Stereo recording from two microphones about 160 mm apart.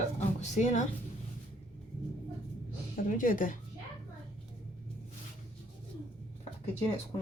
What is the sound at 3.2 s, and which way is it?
Speech, 55° left (ahead or behind).